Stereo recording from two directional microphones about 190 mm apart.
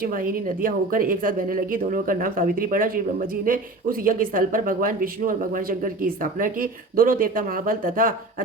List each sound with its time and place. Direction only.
0.0 s speech: 50° right (ahead or behind)